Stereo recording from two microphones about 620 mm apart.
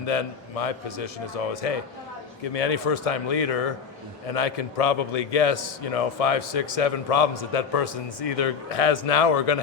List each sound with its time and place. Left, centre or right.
0.0 s a man's voice: left